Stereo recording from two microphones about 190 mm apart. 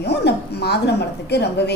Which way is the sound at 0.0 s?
60° left (ahead or behind).